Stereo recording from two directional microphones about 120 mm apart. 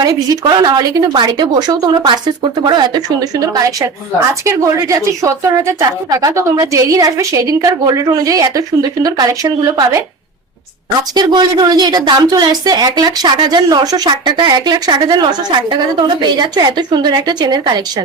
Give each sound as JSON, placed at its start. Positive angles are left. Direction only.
{"t": 0.0, "sound": "a woman's voice", "side_deg": -30}
{"t": 10.8, "sound": "a woman's voice", "side_deg": -35}